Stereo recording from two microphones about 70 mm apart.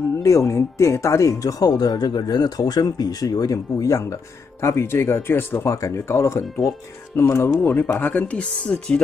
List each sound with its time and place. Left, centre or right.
0.2 s speech: left
4.6 s speech: left
5.7 s speech: left; by 8.7 s centre